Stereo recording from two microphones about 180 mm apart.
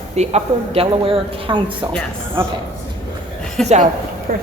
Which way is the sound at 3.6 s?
5° left (ahead or behind).